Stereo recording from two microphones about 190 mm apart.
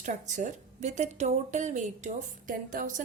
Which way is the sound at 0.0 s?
40° right (ahead or behind).